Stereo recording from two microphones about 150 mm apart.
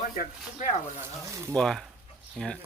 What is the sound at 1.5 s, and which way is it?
Speech, 5° left (ahead or behind).